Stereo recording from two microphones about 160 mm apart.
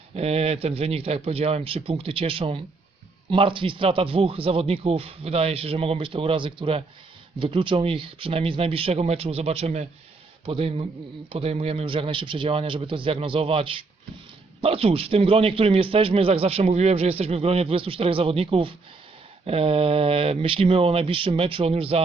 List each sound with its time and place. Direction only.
0.2 s a man's voice: 40° right (ahead or behind)